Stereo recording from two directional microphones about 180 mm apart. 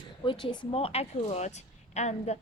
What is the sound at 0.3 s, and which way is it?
A woman's voice, 25° left (ahead or behind).